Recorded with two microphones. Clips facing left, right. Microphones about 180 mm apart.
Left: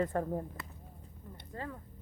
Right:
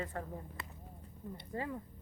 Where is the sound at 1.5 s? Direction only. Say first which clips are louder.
Right 2 dB; 15° right (ahead or behind).